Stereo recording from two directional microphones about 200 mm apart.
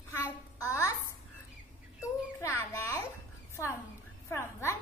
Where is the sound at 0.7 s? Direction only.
15° left (ahead or behind).